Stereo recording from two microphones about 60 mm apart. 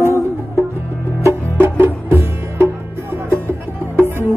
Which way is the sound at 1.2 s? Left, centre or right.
Right.